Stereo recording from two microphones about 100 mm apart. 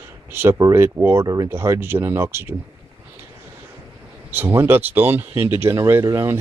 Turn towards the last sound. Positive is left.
turn(degrees=-30)  # may be behind; listen again after turning